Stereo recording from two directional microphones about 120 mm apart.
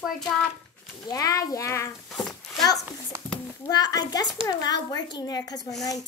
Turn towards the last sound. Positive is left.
turn(degrees=35)  # may be behind; listen again after turning